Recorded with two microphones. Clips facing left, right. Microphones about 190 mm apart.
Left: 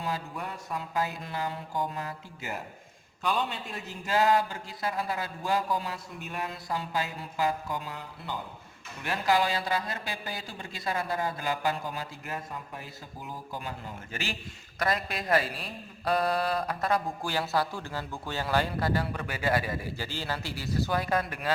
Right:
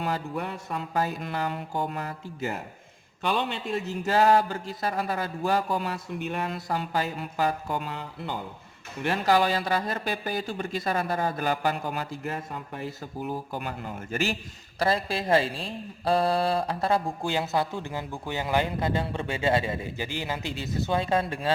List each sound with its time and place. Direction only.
0.0 s a man's voice: 65° right (ahead or behind)
3.2 s a man's voice: 70° right (ahead or behind)
4.9 s a man's voice: 60° right (ahead or behind)
13.2 s a man's voice: 65° right (ahead or behind); by 14.3 s 45° right (ahead or behind)
14.8 s speech: 30° right (ahead or behind)